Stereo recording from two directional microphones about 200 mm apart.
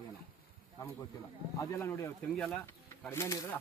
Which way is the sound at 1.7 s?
10° left (ahead or behind).